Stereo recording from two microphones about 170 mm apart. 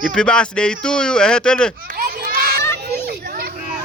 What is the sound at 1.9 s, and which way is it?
Children playing, 60° right (ahead or behind).